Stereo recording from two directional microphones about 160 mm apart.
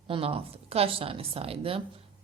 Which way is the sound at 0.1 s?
35° right (ahead or behind).